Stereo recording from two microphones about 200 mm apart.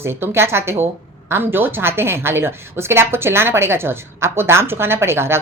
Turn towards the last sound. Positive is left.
turn(degrees=-10)  # may be behind; listen again after turning